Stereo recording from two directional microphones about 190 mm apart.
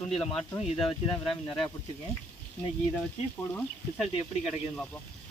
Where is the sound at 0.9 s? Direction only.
25° left (ahead or behind).